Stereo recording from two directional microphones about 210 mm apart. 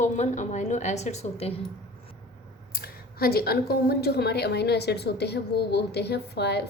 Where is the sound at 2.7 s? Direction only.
45° left (ahead or behind).